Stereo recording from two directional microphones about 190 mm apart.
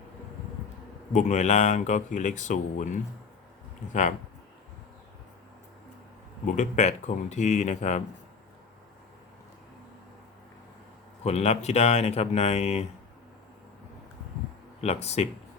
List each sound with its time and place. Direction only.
1.1 s speech: 40° left (ahead or behind)
6.4 s speech: 40° left (ahead or behind)
11.2 s speech: 35° left (ahead or behind)
14.8 s speech: 35° left (ahead or behind)